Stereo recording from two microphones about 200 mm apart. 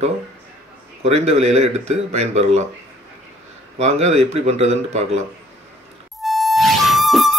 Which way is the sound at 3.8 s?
35° right (ahead or behind).